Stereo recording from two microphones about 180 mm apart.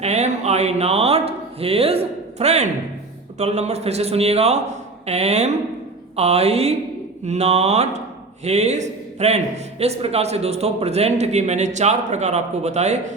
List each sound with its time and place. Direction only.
0.0 s a man's voice: 35° right (ahead or behind)